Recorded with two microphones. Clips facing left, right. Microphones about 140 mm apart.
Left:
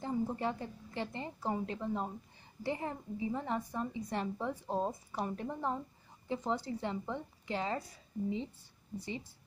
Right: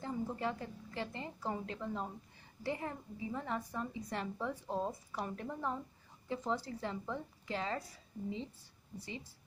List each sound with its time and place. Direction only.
0.0 s a woman's voice: 25° left (ahead or behind)